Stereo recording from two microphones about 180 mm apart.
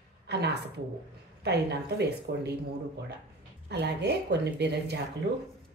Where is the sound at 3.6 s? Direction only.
70° right (ahead or behind).